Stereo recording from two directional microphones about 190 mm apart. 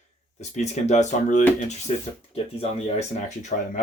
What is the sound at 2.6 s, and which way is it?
Speech, 35° left (ahead or behind).